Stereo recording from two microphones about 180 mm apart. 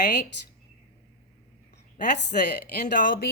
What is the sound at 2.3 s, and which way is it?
Speech, 50° left (ahead or behind).